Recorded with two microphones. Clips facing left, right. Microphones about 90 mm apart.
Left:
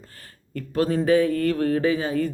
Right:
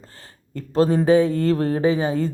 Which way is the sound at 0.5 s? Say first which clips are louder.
Right 4 dB; 25° right (ahead or behind).